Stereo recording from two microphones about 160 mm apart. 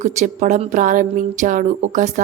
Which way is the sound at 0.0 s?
50° right (ahead or behind).